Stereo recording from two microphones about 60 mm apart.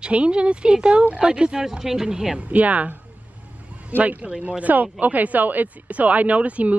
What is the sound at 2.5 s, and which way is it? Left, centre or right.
Speech, right.